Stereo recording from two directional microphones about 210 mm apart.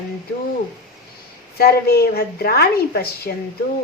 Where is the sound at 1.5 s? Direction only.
45° left (ahead or behind).